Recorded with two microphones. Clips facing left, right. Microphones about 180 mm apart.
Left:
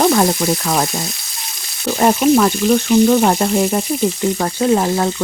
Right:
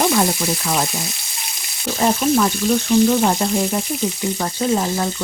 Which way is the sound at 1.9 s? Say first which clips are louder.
Left 5 dB; 60° left (ahead or behind).